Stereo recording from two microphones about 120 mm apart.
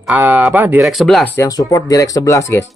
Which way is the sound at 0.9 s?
Centre (ahead or behind).